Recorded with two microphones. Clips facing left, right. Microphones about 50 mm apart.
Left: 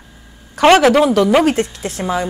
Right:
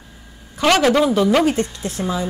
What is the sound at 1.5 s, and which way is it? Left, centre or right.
Speech, left.